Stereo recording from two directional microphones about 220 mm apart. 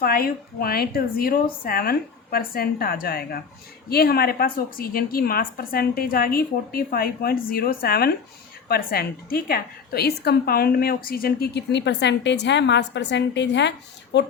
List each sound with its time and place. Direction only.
0.0 s a woman's voice: 45° left (ahead or behind)